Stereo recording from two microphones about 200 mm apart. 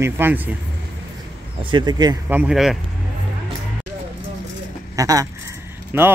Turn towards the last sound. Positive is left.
turn(degrees=-10)  # may be behind; listen again after turning